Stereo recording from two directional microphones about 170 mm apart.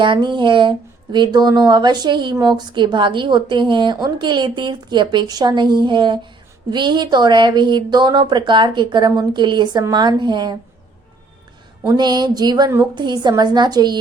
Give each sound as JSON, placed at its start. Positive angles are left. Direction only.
{"t": 0.0, "sound": "speech", "side_deg": -30}
{"t": 11.9, "sound": "speech", "side_deg": -25}